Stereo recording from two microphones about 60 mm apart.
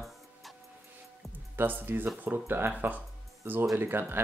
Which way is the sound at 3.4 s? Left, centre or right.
Right.